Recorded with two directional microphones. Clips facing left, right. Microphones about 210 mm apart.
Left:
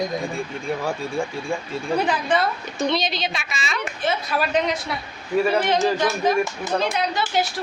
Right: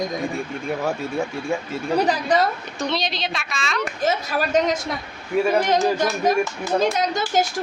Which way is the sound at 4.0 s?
45° right (ahead or behind).